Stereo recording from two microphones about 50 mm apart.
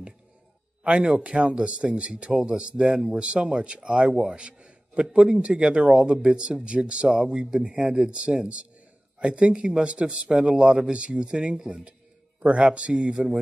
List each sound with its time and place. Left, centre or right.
0.8 s a man's voice: right
4.1 s speech: centre
4.4 s a man's voice: right